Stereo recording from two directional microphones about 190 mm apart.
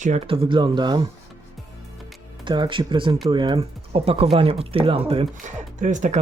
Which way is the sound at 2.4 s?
25° right (ahead or behind).